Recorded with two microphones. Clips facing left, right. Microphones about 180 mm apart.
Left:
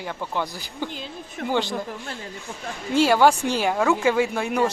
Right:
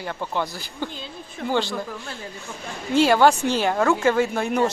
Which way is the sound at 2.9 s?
10° left (ahead or behind).